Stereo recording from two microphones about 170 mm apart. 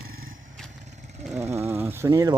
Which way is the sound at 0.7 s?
45° right (ahead or behind).